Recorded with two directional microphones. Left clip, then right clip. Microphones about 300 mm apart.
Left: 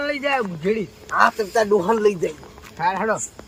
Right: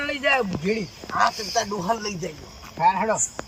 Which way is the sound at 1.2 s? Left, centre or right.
Centre.